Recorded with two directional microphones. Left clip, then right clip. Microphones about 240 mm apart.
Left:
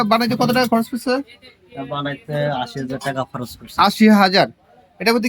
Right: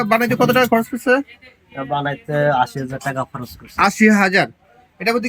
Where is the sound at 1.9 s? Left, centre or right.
Centre.